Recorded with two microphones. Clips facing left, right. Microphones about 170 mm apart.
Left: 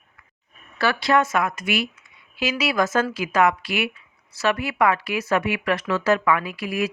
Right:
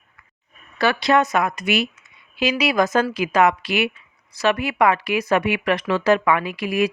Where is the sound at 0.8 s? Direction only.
20° right (ahead or behind).